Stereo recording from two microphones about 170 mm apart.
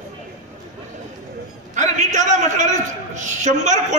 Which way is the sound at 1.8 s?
45° right (ahead or behind).